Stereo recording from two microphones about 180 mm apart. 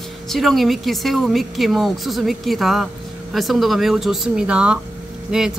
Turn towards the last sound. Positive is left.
turn(degrees=-5)  # may be behind; listen again after turning